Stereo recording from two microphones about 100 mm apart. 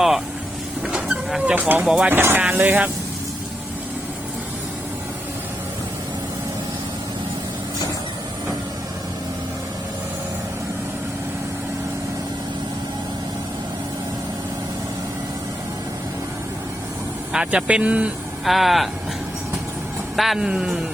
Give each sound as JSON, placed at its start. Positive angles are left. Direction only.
{"t": 0.9, "sound": "vehicle", "side_deg": -10}
{"t": 1.5, "sound": "speech", "side_deg": -20}
{"t": 1.8, "sound": "speech", "side_deg": -5}
{"t": 2.0, "sound": "speech", "side_deg": -20}
{"t": 17.3, "sound": "speech", "side_deg": -10}
{"t": 18.4, "sound": "speech", "side_deg": 0}
{"t": 20.1, "sound": "speech", "side_deg": 0}